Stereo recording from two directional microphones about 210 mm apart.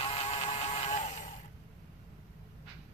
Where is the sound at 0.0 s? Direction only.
30° left (ahead or behind).